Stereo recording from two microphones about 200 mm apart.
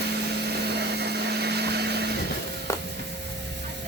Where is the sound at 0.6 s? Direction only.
55° right (ahead or behind).